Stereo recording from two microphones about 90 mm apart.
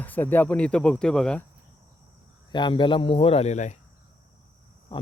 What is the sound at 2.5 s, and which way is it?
Speech, 60° left (ahead or behind).